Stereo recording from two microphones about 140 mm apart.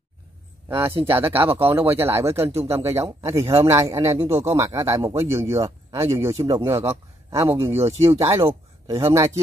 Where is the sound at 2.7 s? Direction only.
20° right (ahead or behind).